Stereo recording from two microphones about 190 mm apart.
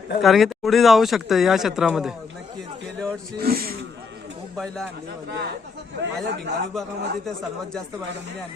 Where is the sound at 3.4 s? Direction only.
50° right (ahead or behind).